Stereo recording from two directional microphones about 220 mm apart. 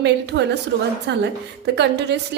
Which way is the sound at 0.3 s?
50° right (ahead or behind).